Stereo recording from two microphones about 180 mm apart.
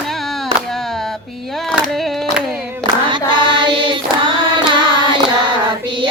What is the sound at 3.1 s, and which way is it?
Hands, 25° right (ahead or behind).